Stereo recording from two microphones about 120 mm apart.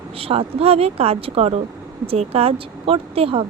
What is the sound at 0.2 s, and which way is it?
Speech, 55° right (ahead or behind).